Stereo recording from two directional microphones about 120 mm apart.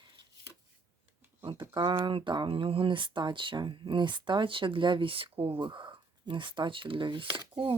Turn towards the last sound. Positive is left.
turn(degrees=-45)  # may be behind; listen again after turning